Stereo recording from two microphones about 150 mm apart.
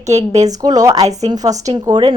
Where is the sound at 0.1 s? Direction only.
50° right (ahead or behind).